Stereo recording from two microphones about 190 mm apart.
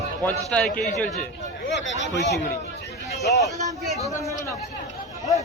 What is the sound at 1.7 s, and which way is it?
Speech, 70° left (ahead or behind).